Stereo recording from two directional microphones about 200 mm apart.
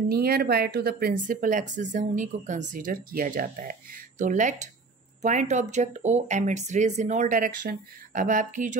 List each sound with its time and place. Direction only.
0.1 s speech: 50° right (ahead or behind)